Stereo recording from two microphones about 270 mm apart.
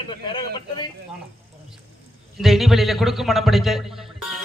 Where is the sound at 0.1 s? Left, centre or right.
Centre.